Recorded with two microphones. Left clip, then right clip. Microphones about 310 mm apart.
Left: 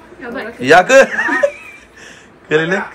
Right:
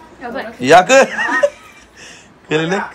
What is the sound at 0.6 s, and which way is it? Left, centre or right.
Speech, centre.